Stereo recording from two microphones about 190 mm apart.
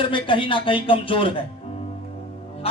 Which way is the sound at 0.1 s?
25° left (ahead or behind).